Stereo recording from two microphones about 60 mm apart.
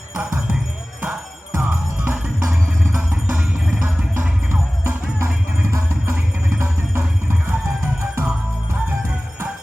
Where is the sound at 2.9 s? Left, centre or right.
Right.